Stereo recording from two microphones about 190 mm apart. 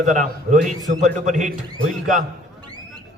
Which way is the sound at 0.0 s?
40° right (ahead or behind).